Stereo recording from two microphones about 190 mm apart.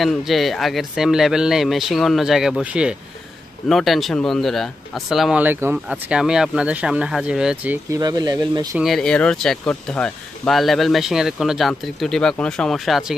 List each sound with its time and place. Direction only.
0.0 s speech: centre (ahead or behind)
8.0 s speech: 20° right (ahead or behind)
8.7 s speech: centre (ahead or behind)